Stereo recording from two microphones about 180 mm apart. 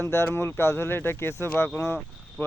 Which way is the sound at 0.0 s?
15° left (ahead or behind).